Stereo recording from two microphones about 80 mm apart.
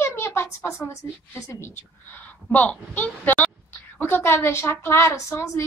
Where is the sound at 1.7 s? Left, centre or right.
Left.